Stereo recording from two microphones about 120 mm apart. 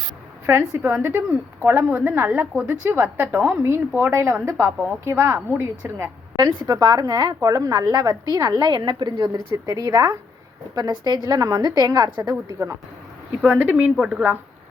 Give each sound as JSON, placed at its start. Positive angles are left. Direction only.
{"t": 0.4, "sound": "a woman's voice", "side_deg": -20}
{"t": 6.7, "sound": "a woman's voice", "side_deg": -30}
{"t": 13.4, "sound": "a woman's voice", "side_deg": -15}